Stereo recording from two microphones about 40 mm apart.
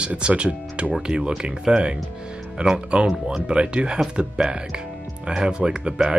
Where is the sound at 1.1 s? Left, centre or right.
Centre.